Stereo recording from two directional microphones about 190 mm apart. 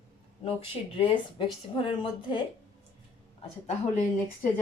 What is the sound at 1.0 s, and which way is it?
A woman's voice, 25° left (ahead or behind).